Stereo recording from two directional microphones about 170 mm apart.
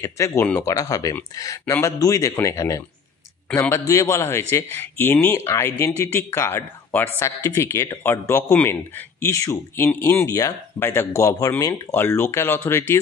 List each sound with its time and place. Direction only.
0.0 s speech: 15° left (ahead or behind)